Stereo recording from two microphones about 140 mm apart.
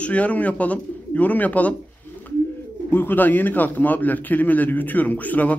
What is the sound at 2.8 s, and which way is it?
A man's voice, 15° left (ahead or behind).